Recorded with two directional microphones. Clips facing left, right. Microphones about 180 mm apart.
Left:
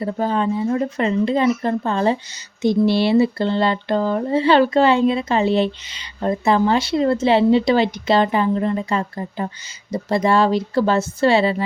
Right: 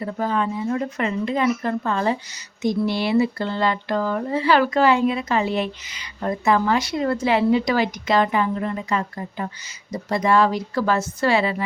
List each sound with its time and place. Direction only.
0.0 s speech: 30° left (ahead or behind)